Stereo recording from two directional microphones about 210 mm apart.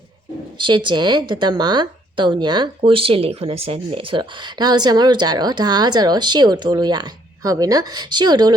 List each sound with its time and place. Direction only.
0.6 s speech: 20° right (ahead or behind)